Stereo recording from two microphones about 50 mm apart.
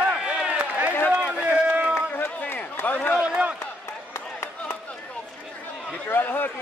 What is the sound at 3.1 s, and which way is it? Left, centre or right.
Run, right.